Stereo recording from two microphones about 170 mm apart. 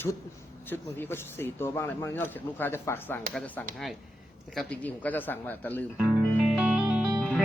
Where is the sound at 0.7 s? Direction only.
10° left (ahead or behind).